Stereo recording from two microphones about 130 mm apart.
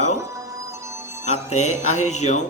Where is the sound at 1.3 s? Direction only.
60° left (ahead or behind).